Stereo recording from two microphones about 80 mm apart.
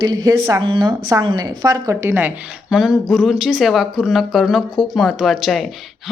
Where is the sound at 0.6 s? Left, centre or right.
Right.